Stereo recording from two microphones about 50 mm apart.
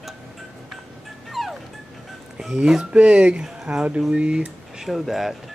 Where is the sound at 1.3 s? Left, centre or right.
Centre.